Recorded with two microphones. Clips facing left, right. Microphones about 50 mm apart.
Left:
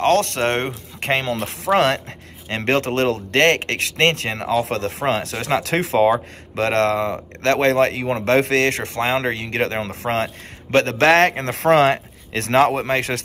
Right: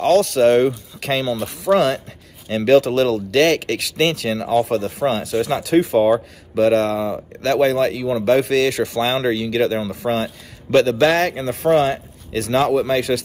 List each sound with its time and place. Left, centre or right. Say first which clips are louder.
0.0 s speech: right 3 dB; left
1.3 s speech: right 1 dB; left
2.4 s speech: right 6 dB; left